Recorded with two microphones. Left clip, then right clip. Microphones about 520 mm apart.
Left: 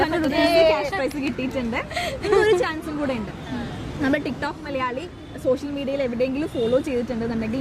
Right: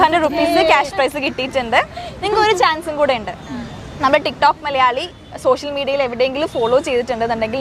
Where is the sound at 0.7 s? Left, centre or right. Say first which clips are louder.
Right 8 dB; right.